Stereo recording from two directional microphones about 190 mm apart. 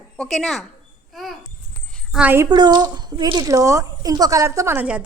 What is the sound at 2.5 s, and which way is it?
A woman's voice, 20° right (ahead or behind).